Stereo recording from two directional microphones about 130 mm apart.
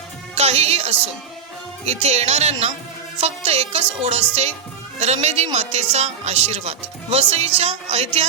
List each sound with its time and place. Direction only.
0.3 s a woman's voice: 55° right (ahead or behind)